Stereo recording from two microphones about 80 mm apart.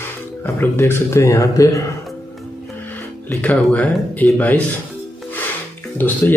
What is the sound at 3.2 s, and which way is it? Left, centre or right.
Speech, centre.